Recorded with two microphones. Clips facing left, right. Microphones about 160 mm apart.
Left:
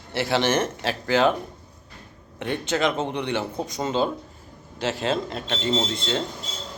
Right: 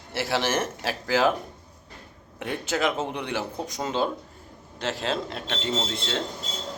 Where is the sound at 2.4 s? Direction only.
Centre (ahead or behind).